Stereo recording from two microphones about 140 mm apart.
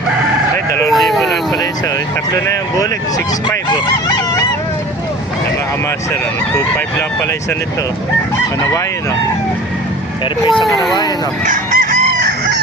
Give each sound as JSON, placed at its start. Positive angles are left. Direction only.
{"t": 0.9, "sound": "a sound", "side_deg": 0}
{"t": 2.3, "sound": "speech", "side_deg": 25}
{"t": 11.4, "sound": "fowl", "side_deg": -65}